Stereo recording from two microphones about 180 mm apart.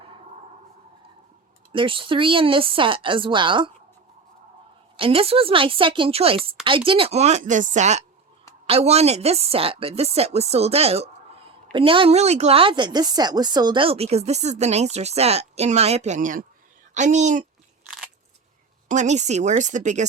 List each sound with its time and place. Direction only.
1.7 s speech: 30° right (ahead or behind)
4.9 s a woman's voice: 30° right (ahead or behind)
18.9 s a woman's voice: 40° right (ahead or behind)